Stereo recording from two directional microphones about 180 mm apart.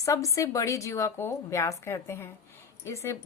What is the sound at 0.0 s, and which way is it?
A woman's voice, 20° left (ahead or behind).